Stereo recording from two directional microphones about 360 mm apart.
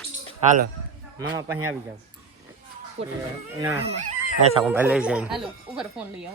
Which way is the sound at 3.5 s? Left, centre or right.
Centre.